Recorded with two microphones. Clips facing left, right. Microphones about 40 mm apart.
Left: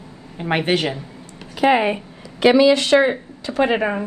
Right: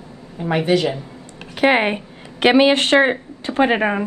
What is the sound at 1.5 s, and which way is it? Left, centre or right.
A woman's voice, right.